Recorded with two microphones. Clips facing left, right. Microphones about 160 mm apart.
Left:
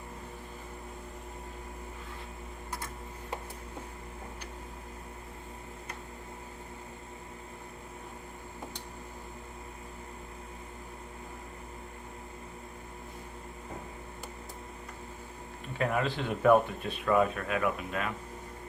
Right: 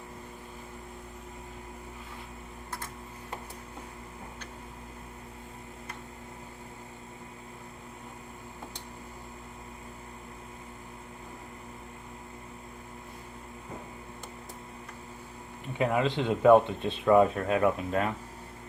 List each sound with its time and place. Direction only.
15.8 s speech: 20° right (ahead or behind)